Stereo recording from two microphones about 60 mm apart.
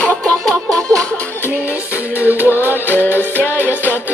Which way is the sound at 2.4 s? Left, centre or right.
Left.